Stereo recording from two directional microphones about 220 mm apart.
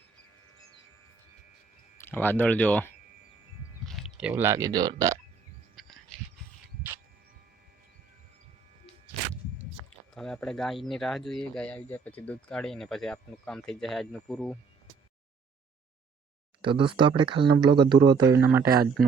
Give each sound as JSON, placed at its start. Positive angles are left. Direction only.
{"t": 2.0, "sound": "speech", "side_deg": 10}
{"t": 5.8, "sound": "a sound", "side_deg": 0}
{"t": 10.2, "sound": "speech", "side_deg": 5}
{"t": 16.6, "sound": "speech", "side_deg": -25}